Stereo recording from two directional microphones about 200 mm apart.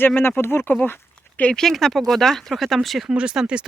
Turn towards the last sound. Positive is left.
turn(degrees=-5)  # may be behind; listen again after turning